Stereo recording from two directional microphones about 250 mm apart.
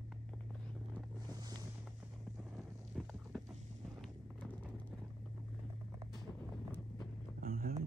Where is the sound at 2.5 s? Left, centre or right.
Centre.